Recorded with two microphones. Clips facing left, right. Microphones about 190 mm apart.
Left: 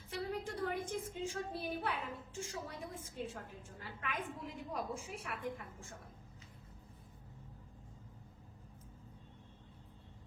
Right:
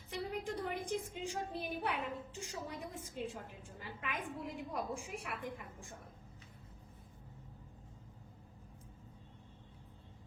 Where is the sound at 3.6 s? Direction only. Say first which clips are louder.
Right 1 dB; 15° right (ahead or behind).